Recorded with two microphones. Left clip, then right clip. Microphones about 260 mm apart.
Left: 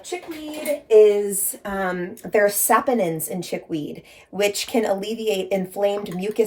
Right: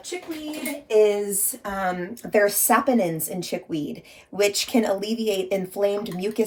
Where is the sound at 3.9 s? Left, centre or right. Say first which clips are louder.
Left 1 dB; centre.